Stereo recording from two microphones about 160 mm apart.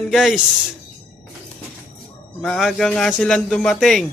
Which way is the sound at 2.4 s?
5° left (ahead or behind).